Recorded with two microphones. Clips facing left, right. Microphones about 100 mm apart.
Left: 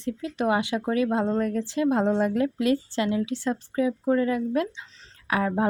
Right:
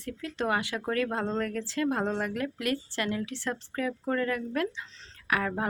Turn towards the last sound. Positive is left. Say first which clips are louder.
# left 5 dB
turn(degrees=25)  # may be behind; listen again after turning